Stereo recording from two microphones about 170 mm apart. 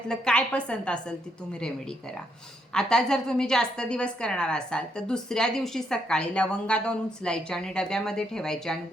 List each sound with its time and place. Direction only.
0.1 s a woman's voice: 5° left (ahead or behind)